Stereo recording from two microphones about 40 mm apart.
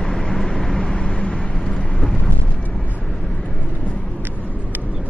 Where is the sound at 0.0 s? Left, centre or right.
Centre.